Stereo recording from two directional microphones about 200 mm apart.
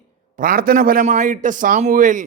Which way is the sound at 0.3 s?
45° right (ahead or behind).